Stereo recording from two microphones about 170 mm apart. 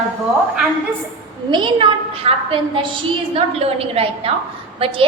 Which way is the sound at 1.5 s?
30° right (ahead or behind).